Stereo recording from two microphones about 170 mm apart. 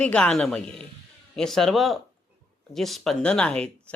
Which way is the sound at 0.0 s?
5° left (ahead or behind).